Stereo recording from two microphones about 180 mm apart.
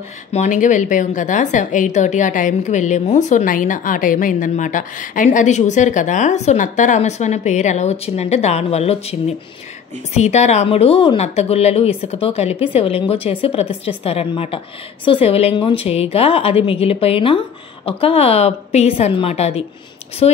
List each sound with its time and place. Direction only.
0.3 s a woman's voice: 40° left (ahead or behind)
10.1 s a woman's voice: 40° left (ahead or behind)